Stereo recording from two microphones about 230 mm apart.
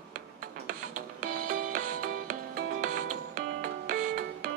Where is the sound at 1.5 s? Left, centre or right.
Right.